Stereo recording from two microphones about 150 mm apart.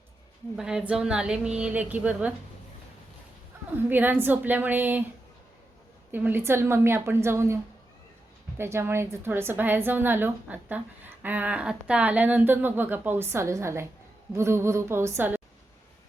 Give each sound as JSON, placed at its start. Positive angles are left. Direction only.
{"t": 0.5, "sound": "a woman's voice", "side_deg": -5}
{"t": 3.8, "sound": "a woman's voice", "side_deg": -10}
{"t": 6.1, "sound": "a woman's voice", "side_deg": -15}